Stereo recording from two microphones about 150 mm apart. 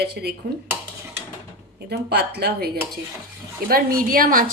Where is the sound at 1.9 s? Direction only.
90° right.